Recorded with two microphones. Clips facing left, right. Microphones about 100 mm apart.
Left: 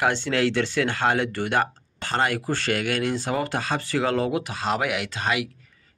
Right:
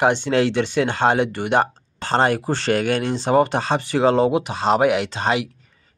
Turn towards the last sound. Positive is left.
turn(degrees=-30)  # may be behind; listen again after turning